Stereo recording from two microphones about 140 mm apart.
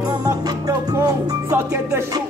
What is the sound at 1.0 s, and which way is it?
Music, 20° right (ahead or behind).